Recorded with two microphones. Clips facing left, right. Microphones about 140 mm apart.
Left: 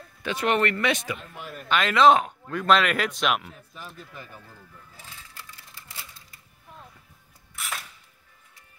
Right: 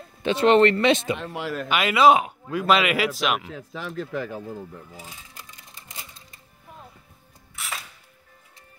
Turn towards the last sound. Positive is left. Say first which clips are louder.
# even
turn(degrees=0)  # may be behind; listen again after turning